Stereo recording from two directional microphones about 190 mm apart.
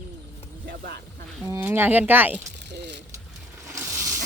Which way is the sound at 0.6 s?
55° right (ahead or behind).